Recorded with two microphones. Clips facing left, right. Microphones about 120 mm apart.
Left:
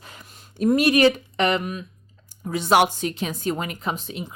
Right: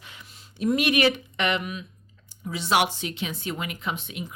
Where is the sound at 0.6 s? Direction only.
40° left (ahead or behind).